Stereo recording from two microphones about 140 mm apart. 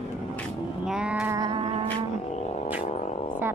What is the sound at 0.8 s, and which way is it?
Child singing, 5° right (ahead or behind).